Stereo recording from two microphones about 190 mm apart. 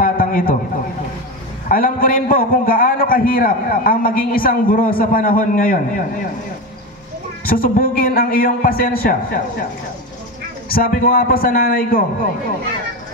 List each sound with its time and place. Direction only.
0.0 s a sound: 50° left (ahead or behind)
1.7 s a man's voice: 50° left (ahead or behind)
7.4 s a man's voice: 50° left (ahead or behind)
10.7 s a man's voice: 50° left (ahead or behind)